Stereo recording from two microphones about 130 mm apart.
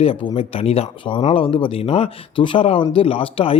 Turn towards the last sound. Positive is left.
turn(degrees=45)  # may be behind; listen again after turning